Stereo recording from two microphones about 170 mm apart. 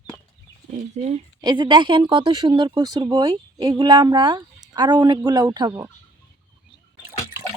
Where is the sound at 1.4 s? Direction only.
25° right (ahead or behind).